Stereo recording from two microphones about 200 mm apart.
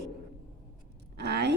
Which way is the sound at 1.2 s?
55° right (ahead or behind).